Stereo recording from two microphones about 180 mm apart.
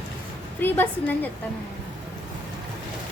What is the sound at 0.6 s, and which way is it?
Speech, 10° left (ahead or behind).